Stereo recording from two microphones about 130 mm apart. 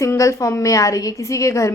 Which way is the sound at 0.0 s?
25° left (ahead or behind).